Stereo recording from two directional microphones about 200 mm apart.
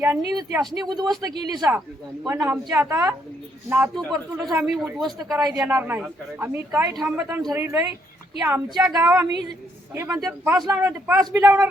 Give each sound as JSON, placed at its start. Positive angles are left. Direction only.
{"t": 0.0, "sound": "a man's voice", "side_deg": -15}
{"t": 2.2, "sound": "a man's voice", "side_deg": -10}
{"t": 4.5, "sound": "a woman's voice", "side_deg": -5}
{"t": 10.2, "sound": "a woman's voice", "side_deg": 0}